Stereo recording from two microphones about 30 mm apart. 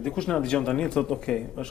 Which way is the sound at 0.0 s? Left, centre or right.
Left.